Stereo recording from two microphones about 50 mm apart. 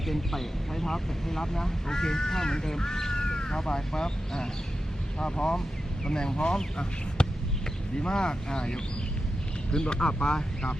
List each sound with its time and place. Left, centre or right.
0.1 s speech: centre